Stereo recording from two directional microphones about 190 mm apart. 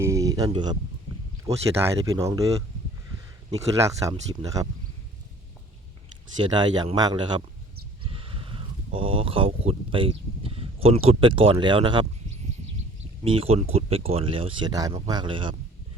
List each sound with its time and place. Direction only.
0.0 s a sound: 15° right (ahead or behind)
1.5 s speech: 15° right (ahead or behind)
3.8 s speech: 15° right (ahead or behind)
6.3 s speech: 25° right (ahead or behind)
13.2 s speech: 30° right (ahead or behind)